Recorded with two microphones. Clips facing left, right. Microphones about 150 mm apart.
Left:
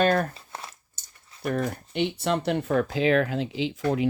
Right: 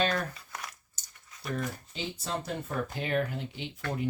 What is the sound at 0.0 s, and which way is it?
Speech, 55° left (ahead or behind).